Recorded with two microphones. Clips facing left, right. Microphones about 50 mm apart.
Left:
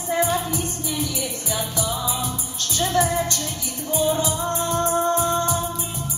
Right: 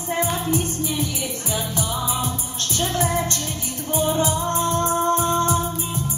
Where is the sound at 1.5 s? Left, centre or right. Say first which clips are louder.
Even; right.